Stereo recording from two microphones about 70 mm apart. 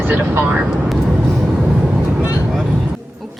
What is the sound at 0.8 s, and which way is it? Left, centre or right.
Vehicle, centre.